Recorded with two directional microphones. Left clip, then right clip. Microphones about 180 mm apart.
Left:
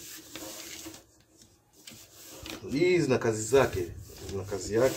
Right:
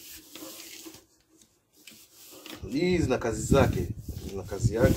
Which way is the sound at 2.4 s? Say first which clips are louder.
Left 2 dB; 20° right (ahead or behind).